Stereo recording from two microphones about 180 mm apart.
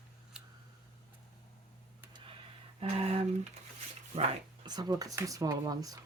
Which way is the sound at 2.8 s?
35° right (ahead or behind).